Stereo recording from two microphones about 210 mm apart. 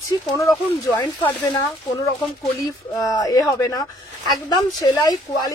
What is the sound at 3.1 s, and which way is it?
Speech, 15° left (ahead or behind).